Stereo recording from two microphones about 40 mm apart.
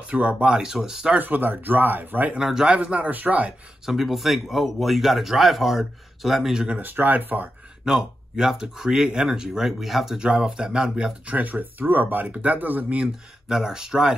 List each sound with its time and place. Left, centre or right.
0.0 s speech: right
0.6 s speech: centre
1.1 s speech: right
2.3 s speech: centre
2.7 s speech: right
3.8 s speech: centre
6.8 s speech: right
7.8 s speech: centre
10.1 s speech: centre
11.2 s speech: right
12.3 s speech: right
13.5 s speech: centre